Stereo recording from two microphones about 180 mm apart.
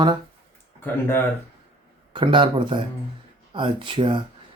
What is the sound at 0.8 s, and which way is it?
Speech, 15° left (ahead or behind).